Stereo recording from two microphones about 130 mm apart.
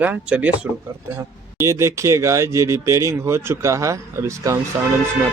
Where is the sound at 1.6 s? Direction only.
20° right (ahead or behind).